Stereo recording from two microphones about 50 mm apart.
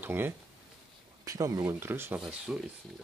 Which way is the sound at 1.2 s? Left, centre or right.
Right.